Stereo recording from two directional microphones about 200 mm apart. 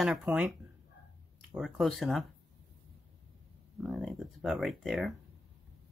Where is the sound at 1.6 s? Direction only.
Centre (ahead or behind).